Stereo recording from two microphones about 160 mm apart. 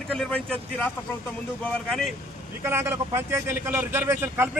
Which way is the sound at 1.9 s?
Centre (ahead or behind).